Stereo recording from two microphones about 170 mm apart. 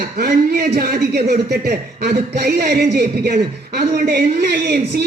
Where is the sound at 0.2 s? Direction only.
65° right (ahead or behind).